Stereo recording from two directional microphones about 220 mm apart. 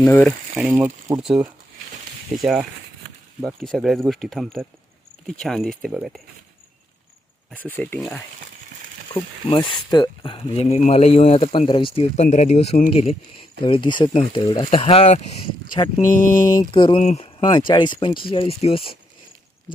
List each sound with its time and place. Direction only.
0.0 s speech: 10° left (ahead or behind)
0.6 s speech: 5° right (ahead or behind)
7.5 s speech: 5° left (ahead or behind)
9.1 s speech: 20° left (ahead or behind)
16.0 s mantra: 35° left (ahead or behind)
16.5 s speech: 20° left (ahead or behind)